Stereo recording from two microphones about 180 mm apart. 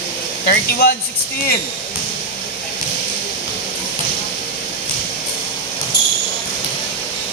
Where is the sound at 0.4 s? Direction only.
60° left (ahead or behind).